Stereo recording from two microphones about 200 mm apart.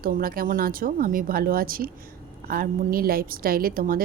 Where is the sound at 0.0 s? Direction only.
45° right (ahead or behind).